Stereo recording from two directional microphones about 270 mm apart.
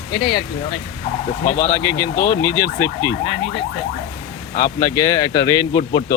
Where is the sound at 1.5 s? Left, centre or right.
Left.